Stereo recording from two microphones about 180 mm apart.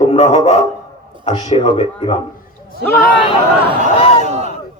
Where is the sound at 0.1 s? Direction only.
35° left (ahead or behind).